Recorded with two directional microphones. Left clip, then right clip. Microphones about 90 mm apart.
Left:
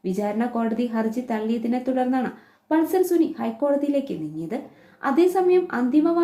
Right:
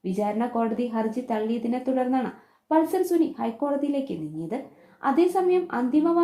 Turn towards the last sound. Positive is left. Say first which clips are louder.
# left 2 dB
turn(degrees=-25)  # may be behind; listen again after turning